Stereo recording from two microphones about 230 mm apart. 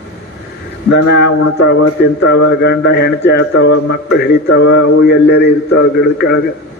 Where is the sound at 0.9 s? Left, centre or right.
Left.